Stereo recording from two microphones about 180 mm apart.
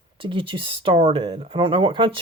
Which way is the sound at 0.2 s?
30° right (ahead or behind).